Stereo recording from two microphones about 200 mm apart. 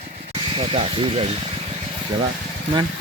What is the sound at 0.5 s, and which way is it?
Speech, 30° right (ahead or behind).